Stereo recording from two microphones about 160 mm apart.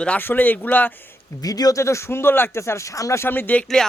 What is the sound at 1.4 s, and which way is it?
Speech, 25° left (ahead or behind).